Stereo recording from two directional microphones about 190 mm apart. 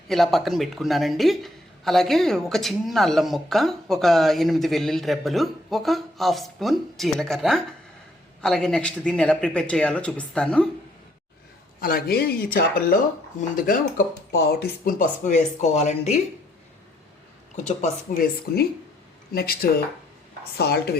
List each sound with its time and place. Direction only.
0.1 s speech: centre (ahead or behind)
11.8 s speech: 50° left (ahead or behind)
14.3 s speech: 55° left (ahead or behind); by 16.2 s 35° left (ahead or behind)
17.6 s speech: 40° left (ahead or behind); by 21.0 s 55° left (ahead or behind)